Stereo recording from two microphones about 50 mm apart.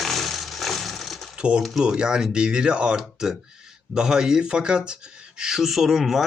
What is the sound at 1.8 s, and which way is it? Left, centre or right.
Speech, centre.